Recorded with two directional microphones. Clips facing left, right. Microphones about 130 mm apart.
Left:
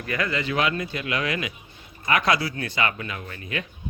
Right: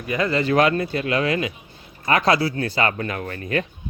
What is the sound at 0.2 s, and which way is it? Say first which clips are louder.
Speech: right 7 dB; 35° right (ahead or behind).